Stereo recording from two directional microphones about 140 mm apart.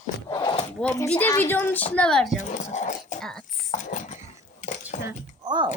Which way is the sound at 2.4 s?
55° left (ahead or behind).